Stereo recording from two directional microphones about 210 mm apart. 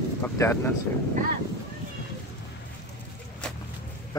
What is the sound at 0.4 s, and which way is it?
Speech, 10° left (ahead or behind).